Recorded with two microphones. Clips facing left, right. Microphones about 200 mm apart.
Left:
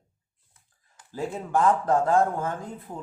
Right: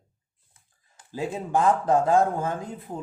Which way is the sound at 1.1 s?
15° right (ahead or behind).